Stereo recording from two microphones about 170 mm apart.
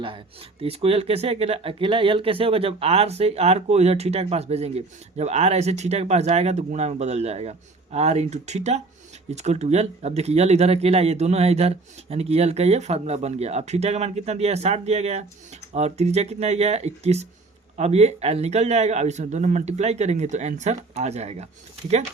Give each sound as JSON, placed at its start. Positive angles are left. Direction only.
{"t": 0.6, "sound": "speech", "side_deg": -35}